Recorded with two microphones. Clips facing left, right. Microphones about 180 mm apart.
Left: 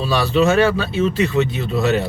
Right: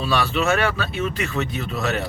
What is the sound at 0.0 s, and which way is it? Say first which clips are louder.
Speech: left 5 dB; 35° left (ahead or behind).